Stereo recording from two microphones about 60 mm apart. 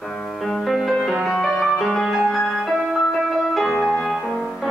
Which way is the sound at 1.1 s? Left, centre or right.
Centre.